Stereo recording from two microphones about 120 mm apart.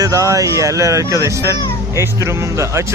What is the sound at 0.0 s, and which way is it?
Speech, 25° right (ahead or behind).